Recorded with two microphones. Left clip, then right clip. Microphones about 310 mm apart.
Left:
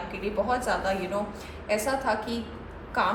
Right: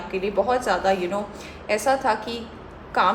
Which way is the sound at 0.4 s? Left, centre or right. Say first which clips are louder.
Right 5 dB; right.